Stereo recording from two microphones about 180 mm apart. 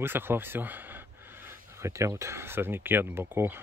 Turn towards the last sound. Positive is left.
turn(degrees=-10)  # may be behind; listen again after turning